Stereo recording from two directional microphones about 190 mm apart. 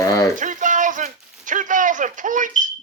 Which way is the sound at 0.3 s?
45° right (ahead or behind).